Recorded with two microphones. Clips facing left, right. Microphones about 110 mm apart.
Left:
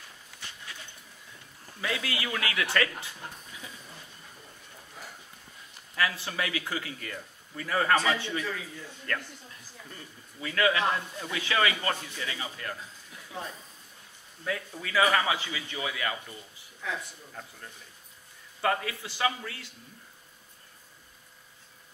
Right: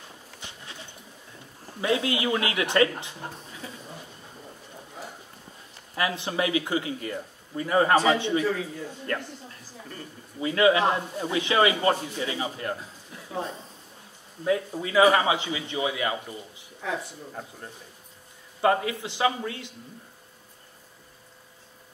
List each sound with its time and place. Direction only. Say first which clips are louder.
0.4 s bird: right 1 dB; 20° right (ahead or behind)
1.7 s a man's voice: right 8 dB; 25° right (ahead or behind)
3.3 s a sound: right 5 dB; 35° right (ahead or behind)
5.9 s a man's voice: right 4 dB; 20° right (ahead or behind)
10.4 s a man's voice: right 6 dB; 25° right (ahead or behind)